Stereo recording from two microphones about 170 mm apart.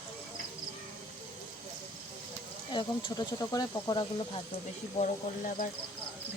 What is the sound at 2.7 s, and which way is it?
Speech, 25° left (ahead or behind).